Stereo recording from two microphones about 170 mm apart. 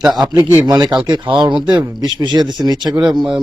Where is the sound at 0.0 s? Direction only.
Centre (ahead or behind).